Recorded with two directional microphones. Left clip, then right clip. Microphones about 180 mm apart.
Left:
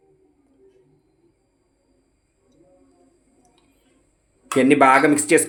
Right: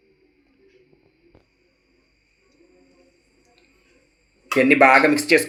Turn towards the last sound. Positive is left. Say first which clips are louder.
# even
turn(degrees=50)  # may be behind; listen again after turning